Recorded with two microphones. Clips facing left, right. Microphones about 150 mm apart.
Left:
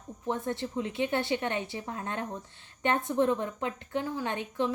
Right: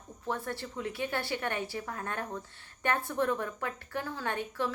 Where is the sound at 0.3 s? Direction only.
20° left (ahead or behind).